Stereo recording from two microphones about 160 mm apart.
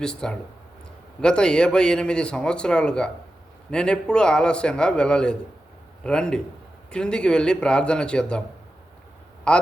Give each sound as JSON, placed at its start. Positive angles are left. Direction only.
{"t": 0.0, "sound": "a man's voice", "side_deg": 5}
{"t": 9.5, "sound": "a man's voice", "side_deg": 5}